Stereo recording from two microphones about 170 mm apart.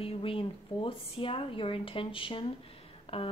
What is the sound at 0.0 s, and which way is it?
Speech, 30° left (ahead or behind).